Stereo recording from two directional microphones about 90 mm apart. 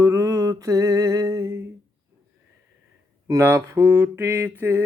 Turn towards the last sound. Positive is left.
turn(degrees=-20)  # may be behind; listen again after turning